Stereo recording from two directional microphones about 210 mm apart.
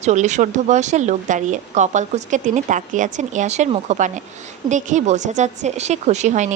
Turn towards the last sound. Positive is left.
turn(degrees=-35)  # may be behind; listen again after turning